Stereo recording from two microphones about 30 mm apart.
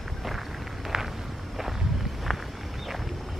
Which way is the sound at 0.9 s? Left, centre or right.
Centre.